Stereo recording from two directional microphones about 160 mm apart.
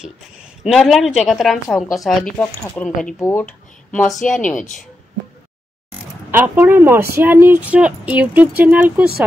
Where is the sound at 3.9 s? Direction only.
Centre (ahead or behind).